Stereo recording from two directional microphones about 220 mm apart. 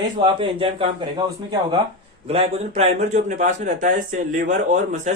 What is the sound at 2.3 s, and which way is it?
Speech, 25° right (ahead or behind).